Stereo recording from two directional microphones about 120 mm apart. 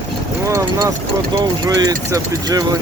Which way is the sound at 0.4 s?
25° right (ahead or behind).